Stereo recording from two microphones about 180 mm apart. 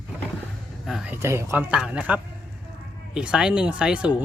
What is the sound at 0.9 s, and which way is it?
Speech, 5° right (ahead or behind).